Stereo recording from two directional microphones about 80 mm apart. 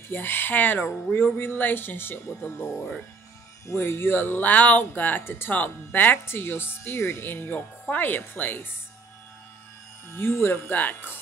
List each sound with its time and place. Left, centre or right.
0.1 s speech: left
10.1 s speech: left